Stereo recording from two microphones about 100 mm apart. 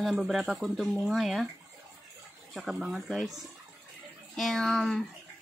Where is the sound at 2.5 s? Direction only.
5° right (ahead or behind).